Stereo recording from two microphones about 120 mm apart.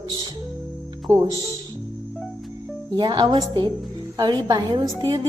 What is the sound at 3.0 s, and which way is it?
A woman's voice, 40° right (ahead or behind).